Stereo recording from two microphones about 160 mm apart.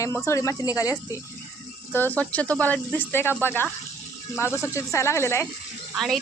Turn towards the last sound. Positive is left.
turn(degrees=0)  # may be behind; listen again after turning